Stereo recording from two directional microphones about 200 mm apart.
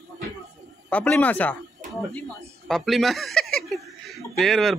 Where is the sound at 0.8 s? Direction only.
5° left (ahead or behind).